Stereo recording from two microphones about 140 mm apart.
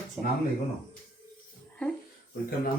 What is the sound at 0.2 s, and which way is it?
Speech, 10° right (ahead or behind).